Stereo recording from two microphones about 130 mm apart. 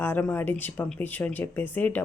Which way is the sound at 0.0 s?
15° left (ahead or behind).